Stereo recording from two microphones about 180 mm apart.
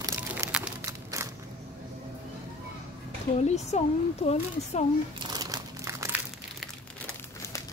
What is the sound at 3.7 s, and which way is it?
Speech, 35° left (ahead or behind).